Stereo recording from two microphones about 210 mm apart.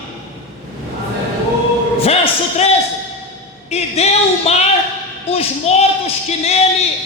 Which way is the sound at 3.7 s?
30° left (ahead or behind).